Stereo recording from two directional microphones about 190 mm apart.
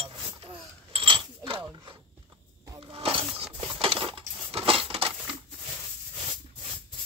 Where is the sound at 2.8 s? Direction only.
30° right (ahead or behind).